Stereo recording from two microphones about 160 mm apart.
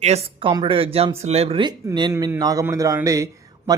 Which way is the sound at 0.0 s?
40° right (ahead or behind).